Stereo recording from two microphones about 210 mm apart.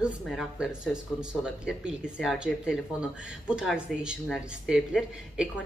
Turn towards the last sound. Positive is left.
turn(degrees=-5)  # may be behind; listen again after turning